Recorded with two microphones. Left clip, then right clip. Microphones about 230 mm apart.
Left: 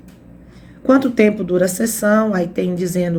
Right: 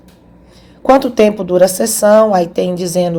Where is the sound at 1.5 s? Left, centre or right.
Centre.